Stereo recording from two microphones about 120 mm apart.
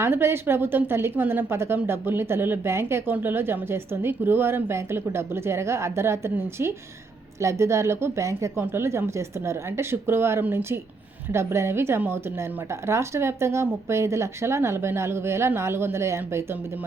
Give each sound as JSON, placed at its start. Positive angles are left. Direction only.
{"t": 0.0, "sound": "a woman's voice", "side_deg": -20}